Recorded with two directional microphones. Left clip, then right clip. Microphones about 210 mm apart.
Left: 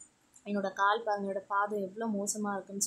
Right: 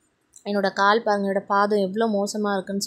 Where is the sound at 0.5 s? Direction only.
25° right (ahead or behind).